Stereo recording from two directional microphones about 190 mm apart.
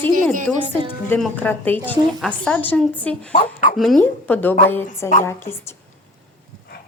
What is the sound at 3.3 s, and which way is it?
Speech, 45° left (ahead or behind).